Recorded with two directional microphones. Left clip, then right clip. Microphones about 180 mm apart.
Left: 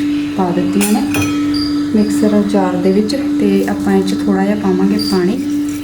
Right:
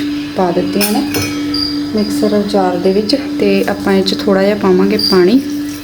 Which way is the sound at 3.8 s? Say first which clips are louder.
Right 2 dB; 55° right (ahead or behind).